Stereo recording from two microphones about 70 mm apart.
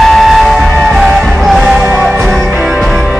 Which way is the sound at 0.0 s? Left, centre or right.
Centre.